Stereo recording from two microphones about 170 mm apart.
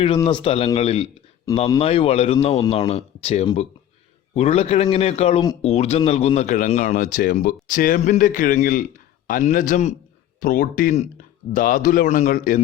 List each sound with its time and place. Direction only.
0.0 s speech: 30° left (ahead or behind); by 12.5 s 50° left (ahead or behind)